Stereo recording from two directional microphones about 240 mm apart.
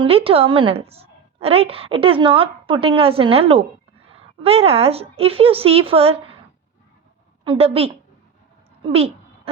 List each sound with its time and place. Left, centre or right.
0.0 s a woman's voice: right
7.4 s a woman's voice: right
8.8 s a sound: right